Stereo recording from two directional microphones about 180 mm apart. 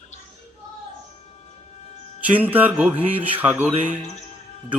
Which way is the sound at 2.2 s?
10° right (ahead or behind).